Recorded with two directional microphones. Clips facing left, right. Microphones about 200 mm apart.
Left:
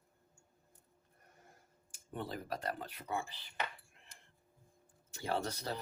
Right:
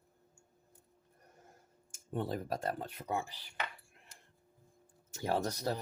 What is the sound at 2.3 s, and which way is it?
Speech, 45° right (ahead or behind).